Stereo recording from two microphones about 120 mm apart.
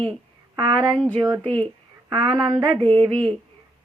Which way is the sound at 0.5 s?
40° right (ahead or behind).